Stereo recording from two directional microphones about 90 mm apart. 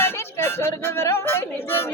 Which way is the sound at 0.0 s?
25° left (ahead or behind).